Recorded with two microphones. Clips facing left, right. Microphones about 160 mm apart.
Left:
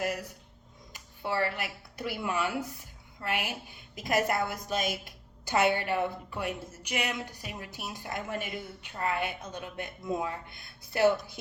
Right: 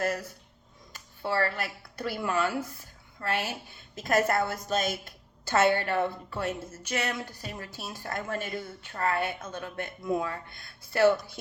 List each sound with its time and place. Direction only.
0.0 s speech: 15° left (ahead or behind)